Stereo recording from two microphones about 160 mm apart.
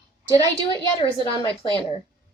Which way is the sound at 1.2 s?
30° left (ahead or behind).